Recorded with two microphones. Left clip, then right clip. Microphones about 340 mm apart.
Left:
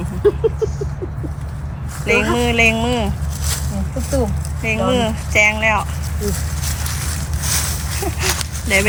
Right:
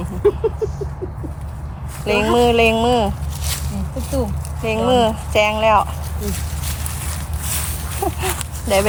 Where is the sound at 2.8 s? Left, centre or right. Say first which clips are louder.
Right 4 dB; centre.